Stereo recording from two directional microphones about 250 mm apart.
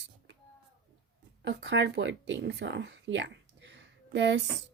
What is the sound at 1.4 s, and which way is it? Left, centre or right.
Speech, right.